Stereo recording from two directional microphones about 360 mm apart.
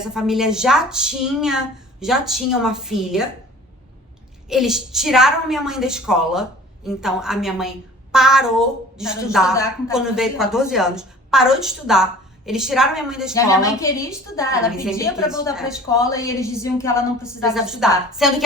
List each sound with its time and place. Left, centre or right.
0.0 s a woman's voice: centre
4.4 s a woman's voice: centre
15.9 s a woman's voice: centre